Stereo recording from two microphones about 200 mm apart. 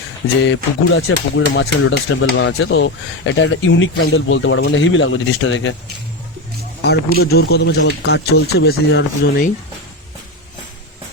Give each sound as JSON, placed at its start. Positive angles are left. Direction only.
{"t": 0.4, "sound": "speech", "side_deg": 70}
{"t": 6.8, "sound": "speech", "side_deg": 50}